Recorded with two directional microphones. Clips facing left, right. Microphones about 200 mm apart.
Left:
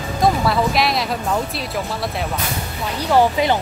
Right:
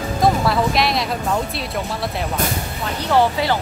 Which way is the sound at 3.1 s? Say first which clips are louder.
Left 2 dB; 20° left (ahead or behind).